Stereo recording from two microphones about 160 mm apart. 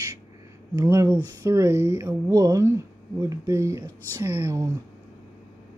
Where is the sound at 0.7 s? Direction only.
20° right (ahead or behind).